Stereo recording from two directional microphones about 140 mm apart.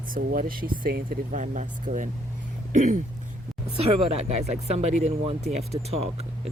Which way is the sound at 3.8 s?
45° right (ahead or behind).